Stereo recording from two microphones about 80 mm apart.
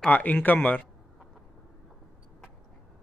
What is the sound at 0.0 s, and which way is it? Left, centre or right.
Speech, centre.